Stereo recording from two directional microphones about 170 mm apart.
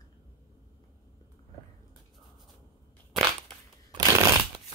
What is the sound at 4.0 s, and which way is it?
Shuffling cards, 20° right (ahead or behind).